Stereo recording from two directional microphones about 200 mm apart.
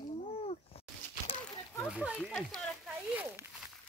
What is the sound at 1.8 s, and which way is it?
Speech, 5° right (ahead or behind).